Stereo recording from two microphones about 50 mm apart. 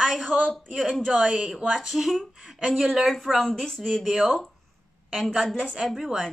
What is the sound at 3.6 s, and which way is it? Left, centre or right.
Speech, centre.